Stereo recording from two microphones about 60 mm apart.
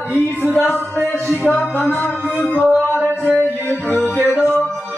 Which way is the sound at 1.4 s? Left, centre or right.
Left.